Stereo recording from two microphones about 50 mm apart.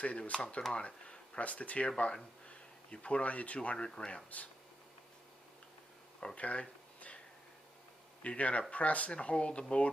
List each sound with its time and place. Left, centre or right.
0.0 s speech: left
1.9 s speech: centre
6.2 s a sound: left
8.2 s speech: left